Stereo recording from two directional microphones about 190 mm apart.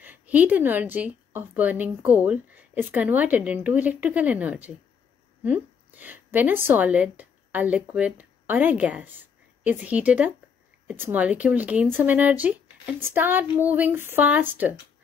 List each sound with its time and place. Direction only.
0.0 s a woman's voice: 10° right (ahead or behind)